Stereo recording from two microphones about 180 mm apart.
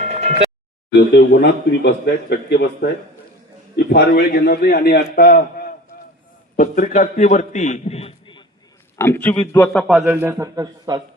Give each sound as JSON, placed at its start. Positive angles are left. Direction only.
{"t": 0.0, "sound": "a sound", "side_deg": -40}
{"t": 0.9, "sound": "a man's voice", "side_deg": 70}
{"t": 9.0, "sound": "a man's voice", "side_deg": 10}
{"t": 9.9, "sound": "a man's voice", "side_deg": -5}